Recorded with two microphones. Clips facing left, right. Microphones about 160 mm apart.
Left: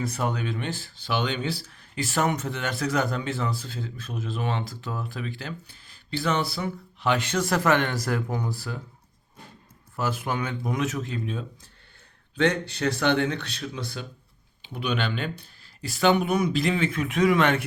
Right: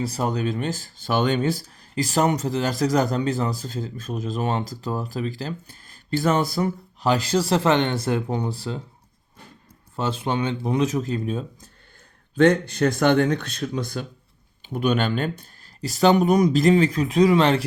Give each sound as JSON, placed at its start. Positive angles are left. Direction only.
{"t": 0.0, "sound": "speech", "side_deg": -35}
{"t": 9.9, "sound": "speech", "side_deg": -30}